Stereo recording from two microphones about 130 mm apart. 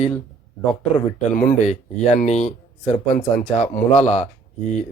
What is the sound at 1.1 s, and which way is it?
Speech, 90° left.